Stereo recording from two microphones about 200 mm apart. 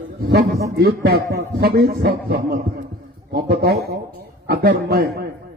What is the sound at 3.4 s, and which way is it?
Speech, 55° right (ahead or behind).